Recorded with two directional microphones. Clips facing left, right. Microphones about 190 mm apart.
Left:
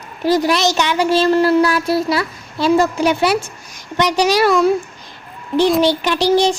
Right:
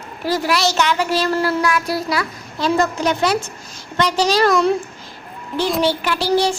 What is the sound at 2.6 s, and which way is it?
A woman's voice, 10° left (ahead or behind).